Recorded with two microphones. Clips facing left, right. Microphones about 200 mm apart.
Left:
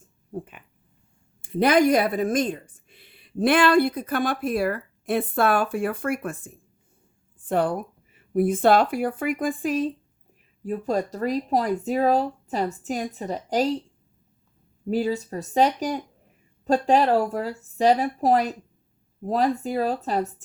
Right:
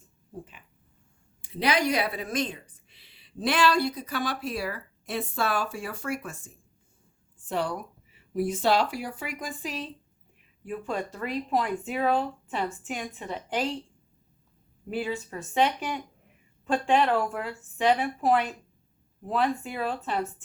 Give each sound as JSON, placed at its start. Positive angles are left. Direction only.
{"t": 0.3, "sound": "speech", "side_deg": 60}
{"t": 10.6, "sound": "speech", "side_deg": 40}
{"t": 14.8, "sound": "speech", "side_deg": 40}